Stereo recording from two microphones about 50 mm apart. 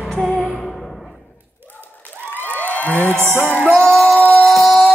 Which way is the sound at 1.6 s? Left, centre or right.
Right.